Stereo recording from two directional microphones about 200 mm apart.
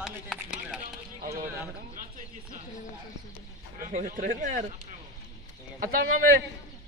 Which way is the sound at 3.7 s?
45° right (ahead or behind).